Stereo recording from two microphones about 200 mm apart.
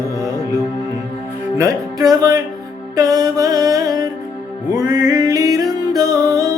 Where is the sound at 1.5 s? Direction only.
15° right (ahead or behind).